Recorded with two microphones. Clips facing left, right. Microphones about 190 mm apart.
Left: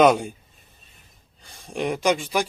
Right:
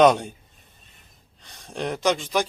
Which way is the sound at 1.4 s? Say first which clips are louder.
Left 3 dB; 10° left (ahead or behind).